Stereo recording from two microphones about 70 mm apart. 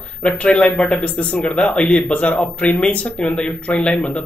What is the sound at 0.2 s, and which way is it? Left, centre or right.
Speech, centre.